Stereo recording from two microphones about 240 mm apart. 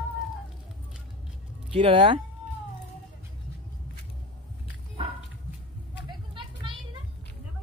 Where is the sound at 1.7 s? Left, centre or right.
Right.